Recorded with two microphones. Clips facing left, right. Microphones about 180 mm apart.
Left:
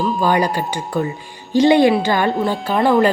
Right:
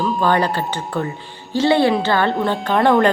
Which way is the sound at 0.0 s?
10° left (ahead or behind).